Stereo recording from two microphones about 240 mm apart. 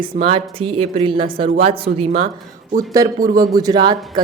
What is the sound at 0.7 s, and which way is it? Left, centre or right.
Speech, right.